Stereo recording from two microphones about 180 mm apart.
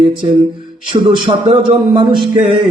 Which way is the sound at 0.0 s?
25° right (ahead or behind).